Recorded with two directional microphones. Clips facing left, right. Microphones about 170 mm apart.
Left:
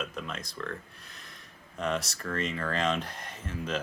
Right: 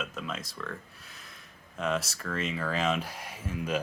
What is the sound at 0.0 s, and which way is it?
Speech, 5° right (ahead or behind).